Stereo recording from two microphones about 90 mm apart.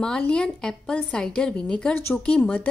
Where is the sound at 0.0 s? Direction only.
10° left (ahead or behind).